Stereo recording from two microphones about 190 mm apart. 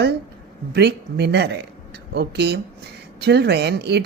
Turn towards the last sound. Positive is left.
turn(degrees=-60)  # may be behind; listen again after turning